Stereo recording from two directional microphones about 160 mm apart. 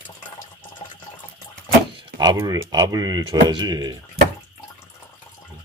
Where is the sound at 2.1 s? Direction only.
25° right (ahead or behind).